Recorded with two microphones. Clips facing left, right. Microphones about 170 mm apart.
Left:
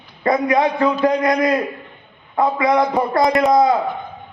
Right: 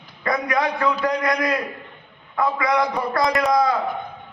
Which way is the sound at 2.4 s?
25° left (ahead or behind).